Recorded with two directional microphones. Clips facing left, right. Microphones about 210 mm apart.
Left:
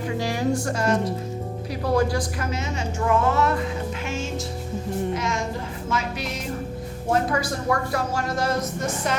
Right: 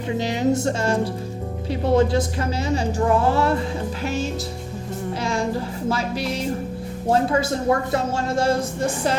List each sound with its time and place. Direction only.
0.2 s a woman's voice: 20° right (ahead or behind)